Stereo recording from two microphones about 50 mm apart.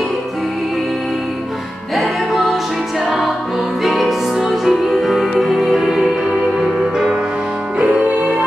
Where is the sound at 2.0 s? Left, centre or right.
Centre.